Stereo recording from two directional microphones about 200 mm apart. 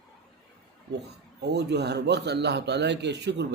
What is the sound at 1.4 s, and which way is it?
Speech, 55° right (ahead or behind).